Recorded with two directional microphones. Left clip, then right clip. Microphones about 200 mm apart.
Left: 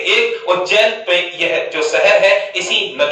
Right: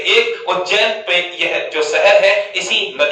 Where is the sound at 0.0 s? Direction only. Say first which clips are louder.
Even; 15° right (ahead or behind).